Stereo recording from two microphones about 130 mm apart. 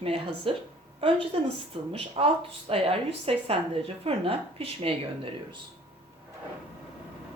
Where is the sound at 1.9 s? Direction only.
45° right (ahead or behind).